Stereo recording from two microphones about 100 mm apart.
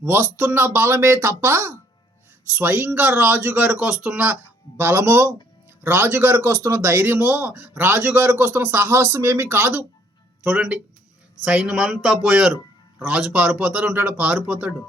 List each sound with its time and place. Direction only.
0.0 s speech: 20° right (ahead or behind)
3.8 s a man's voice: 10° right (ahead or behind); by 9.8 s 25° right (ahead or behind)
10.4 s a man's voice: 10° right (ahead or behind)